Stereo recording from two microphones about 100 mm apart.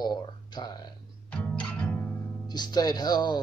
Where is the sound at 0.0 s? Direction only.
45° left (ahead or behind).